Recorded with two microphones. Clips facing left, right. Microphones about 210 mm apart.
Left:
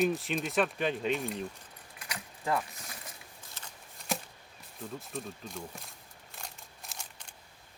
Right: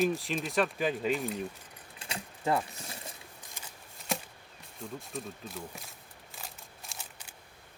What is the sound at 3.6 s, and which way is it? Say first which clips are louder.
Shuffling cards: right 1 dB; 10° right (ahead or behind).